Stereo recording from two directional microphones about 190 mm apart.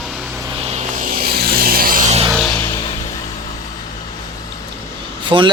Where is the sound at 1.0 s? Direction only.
50° right (ahead or behind).